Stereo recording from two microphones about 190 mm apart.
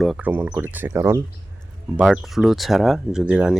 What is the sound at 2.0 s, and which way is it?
Speech, centre (ahead or behind).